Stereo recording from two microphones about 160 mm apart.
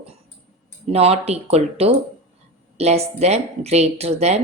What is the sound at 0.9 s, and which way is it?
Speech, 40° right (ahead or behind).